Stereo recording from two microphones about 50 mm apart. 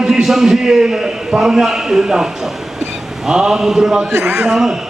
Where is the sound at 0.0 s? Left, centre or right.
Centre.